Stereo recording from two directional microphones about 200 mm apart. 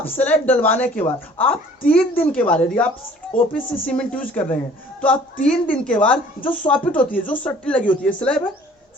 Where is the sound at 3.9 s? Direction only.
5° left (ahead or behind).